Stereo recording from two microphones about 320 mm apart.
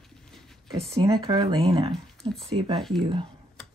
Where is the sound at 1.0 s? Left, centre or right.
Centre.